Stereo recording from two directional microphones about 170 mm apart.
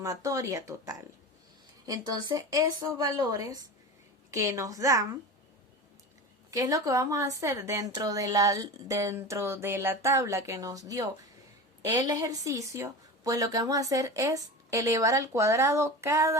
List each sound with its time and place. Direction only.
0.0 s a woman's voice: 20° right (ahead or behind)
6.5 s a woman's voice: 20° right (ahead or behind)